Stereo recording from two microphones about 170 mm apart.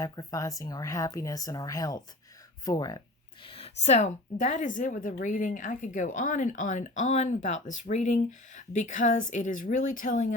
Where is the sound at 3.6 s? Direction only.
40° left (ahead or behind).